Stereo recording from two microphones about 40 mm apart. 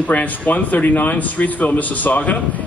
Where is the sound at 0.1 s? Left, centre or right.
Left.